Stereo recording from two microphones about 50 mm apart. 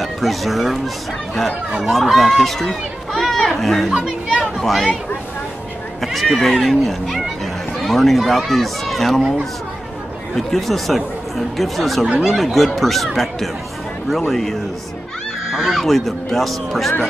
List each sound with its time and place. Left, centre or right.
0.0 s speech: centre
1.8 s speech: centre
4.0 s chatter: centre
4.6 s speech: centre
5.9 s speech: centre
10.3 s speech: centre